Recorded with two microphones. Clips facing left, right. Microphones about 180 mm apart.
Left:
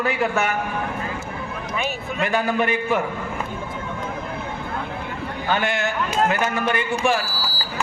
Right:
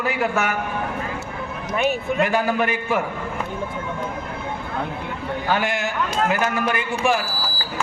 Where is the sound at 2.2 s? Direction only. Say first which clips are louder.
Left 1 dB; 5° right (ahead or behind).